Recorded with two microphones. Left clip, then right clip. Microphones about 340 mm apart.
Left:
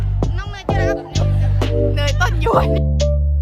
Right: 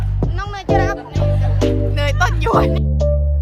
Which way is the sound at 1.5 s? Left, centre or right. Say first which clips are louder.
Left 1 dB; centre.